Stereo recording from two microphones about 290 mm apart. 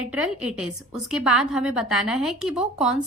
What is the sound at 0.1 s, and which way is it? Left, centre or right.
A woman's voice, centre.